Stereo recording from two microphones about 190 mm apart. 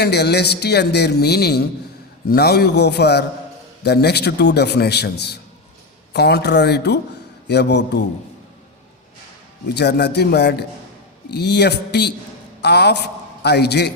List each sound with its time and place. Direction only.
0.0 s a man's voice: 60° left (ahead or behind)
9.7 s a man's voice: 60° left (ahead or behind)